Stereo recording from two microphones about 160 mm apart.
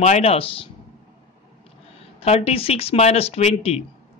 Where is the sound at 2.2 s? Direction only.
40° left (ahead or behind).